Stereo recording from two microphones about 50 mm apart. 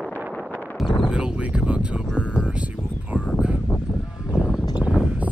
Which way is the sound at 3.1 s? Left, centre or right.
Left.